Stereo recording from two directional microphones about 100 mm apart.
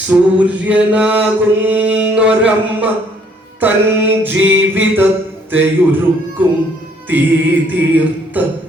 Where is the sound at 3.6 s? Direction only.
20° right (ahead or behind).